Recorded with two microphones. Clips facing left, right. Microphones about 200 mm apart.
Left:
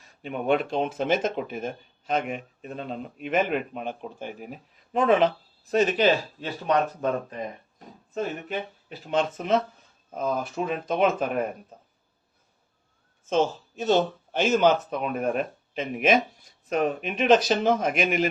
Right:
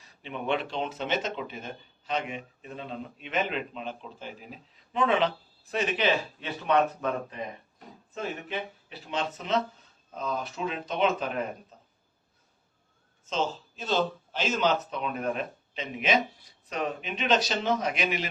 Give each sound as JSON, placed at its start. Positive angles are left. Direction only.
{"t": 0.2, "sound": "speech", "side_deg": 45}
{"t": 13.3, "sound": "a woman's voice", "side_deg": 50}